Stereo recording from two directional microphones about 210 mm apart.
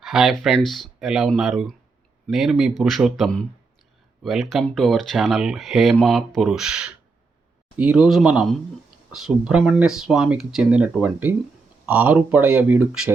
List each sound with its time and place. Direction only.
0.0 s speech: centre (ahead or behind)